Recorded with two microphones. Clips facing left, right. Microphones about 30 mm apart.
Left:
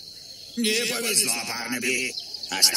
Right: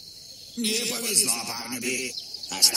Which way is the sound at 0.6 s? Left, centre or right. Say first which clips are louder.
Left 4 dB; left.